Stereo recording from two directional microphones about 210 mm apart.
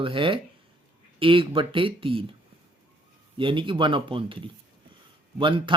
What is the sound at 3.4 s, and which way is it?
Speech, 25° right (ahead or behind).